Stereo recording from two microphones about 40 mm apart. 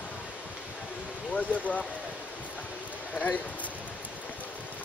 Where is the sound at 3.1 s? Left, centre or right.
Left.